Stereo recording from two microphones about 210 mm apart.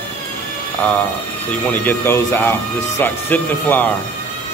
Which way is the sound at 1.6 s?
10° left (ahead or behind).